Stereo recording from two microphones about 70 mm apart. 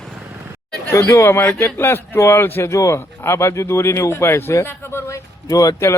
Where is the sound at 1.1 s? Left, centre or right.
Left.